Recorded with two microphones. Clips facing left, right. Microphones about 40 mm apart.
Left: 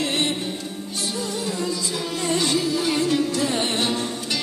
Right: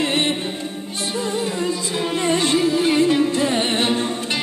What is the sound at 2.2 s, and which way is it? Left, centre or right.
Music, right.